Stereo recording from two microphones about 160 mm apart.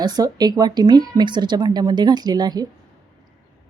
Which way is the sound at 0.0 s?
25° right (ahead or behind).